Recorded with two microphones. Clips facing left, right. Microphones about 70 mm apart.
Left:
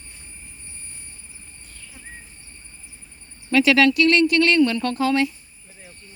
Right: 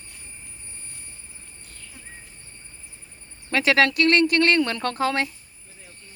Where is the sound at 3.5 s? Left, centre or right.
Right.